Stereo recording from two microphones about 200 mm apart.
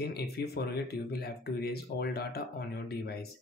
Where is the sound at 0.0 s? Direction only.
55° left (ahead or behind).